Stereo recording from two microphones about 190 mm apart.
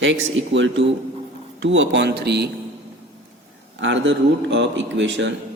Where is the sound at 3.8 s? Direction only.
75° right (ahead or behind).